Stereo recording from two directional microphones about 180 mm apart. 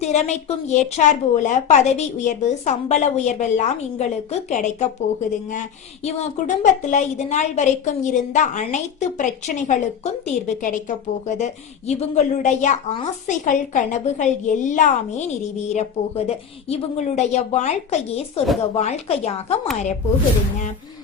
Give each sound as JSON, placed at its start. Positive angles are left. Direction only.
{"t": 0.0, "sound": "a woman's voice", "side_deg": 40}
{"t": 6.1, "sound": "a woman's voice", "side_deg": 40}